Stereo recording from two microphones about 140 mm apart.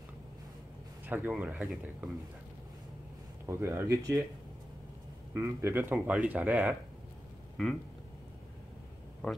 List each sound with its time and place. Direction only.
1.0 s speech: 15° right (ahead or behind)
3.4 s speech: 20° right (ahead or behind)
5.3 s speech: 20° right (ahead or behind)
7.6 s a sound: centre (ahead or behind)